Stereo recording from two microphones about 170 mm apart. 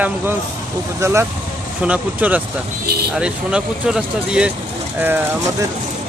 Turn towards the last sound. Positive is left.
turn(degrees=-10)  # may be behind; listen again after turning